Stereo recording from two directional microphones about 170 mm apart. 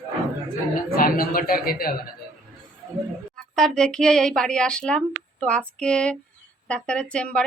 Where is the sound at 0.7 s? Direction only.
60° left (ahead or behind).